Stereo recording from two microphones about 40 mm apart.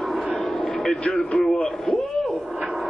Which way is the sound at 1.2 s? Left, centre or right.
Left.